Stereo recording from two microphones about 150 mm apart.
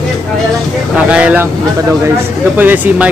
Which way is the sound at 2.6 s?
10° right (ahead or behind).